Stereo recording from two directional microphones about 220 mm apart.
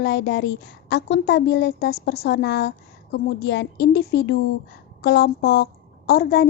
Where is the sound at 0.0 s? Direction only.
50° left (ahead or behind).